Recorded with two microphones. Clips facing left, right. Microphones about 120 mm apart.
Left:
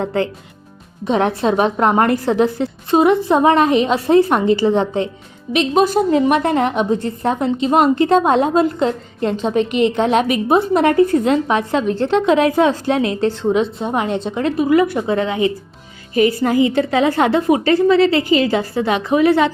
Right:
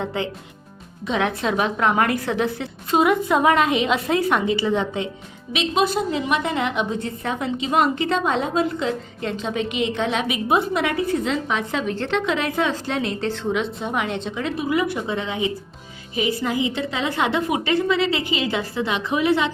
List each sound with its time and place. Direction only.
0.0 s a woman's voice: 40° left (ahead or behind)
9.6 s a woman's voice: centre (ahead or behind)
9.9 s a woman's voice: 45° left (ahead or behind)
11.9 s a woman's voice: 35° left (ahead or behind)